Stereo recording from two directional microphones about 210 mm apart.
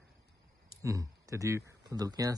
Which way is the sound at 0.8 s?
15° right (ahead or behind).